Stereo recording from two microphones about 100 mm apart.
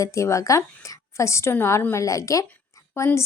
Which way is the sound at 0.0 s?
30° left (ahead or behind).